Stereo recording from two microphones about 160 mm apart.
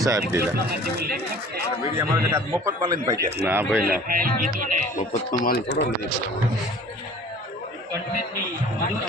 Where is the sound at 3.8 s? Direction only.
65° right (ahead or behind).